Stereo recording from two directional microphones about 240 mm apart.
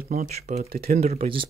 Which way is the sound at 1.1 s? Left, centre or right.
Right.